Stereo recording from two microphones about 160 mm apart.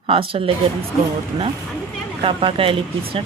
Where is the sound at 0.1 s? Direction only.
35° right (ahead or behind).